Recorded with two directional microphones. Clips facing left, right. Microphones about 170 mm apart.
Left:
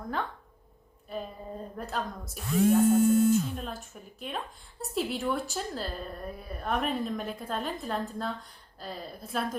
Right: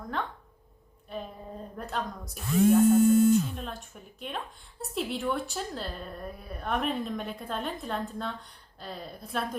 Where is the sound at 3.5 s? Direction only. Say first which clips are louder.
Left 1 dB; centre (ahead or behind).